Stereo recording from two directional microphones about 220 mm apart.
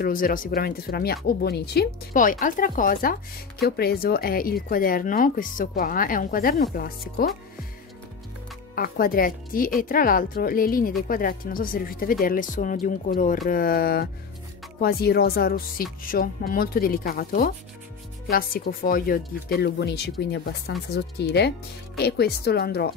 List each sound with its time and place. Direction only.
0.0 s speech: 40° left (ahead or behind)
8.7 s speech: 40° left (ahead or behind)